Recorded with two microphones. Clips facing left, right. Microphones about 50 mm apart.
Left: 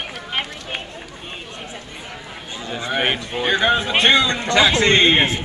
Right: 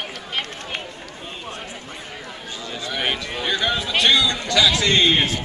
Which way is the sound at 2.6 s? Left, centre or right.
Left.